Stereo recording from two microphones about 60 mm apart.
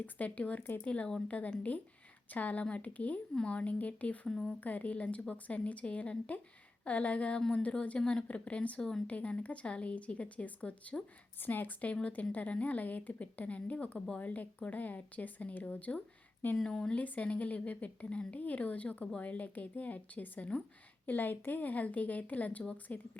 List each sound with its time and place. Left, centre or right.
0.0 s speech: left
4.3 s speech: centre
4.6 s speech: left
8.8 s speech: centre
9.0 s speech: left
16.6 s speech: centre
17.0 s speech: left